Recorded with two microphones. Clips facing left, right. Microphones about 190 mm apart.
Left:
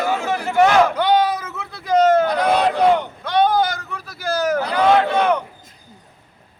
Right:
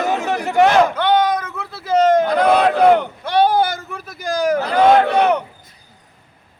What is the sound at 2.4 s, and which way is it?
Speech, 55° right (ahead or behind).